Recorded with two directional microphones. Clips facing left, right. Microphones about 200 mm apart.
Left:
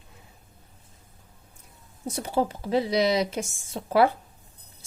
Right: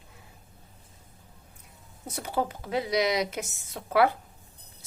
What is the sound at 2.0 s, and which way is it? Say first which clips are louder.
A woman's voice: left 4 dB; 30° left (ahead or behind).